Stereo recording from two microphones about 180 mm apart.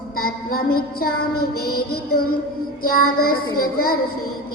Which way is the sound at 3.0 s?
55° left (ahead or behind).